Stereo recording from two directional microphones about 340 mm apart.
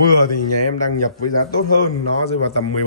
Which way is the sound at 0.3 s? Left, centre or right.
Left.